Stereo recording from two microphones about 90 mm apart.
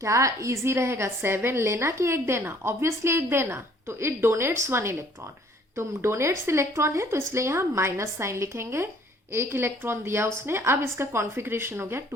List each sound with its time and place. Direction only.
0.0 s a woman's voice: 35° right (ahead or behind)